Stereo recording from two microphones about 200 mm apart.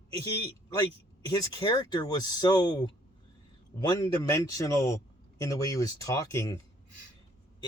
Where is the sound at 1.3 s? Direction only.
20° left (ahead or behind).